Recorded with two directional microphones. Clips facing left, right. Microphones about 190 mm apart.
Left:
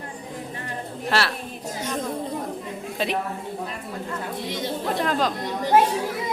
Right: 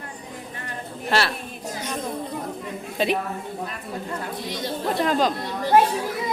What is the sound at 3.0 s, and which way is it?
Speech, centre (ahead or behind).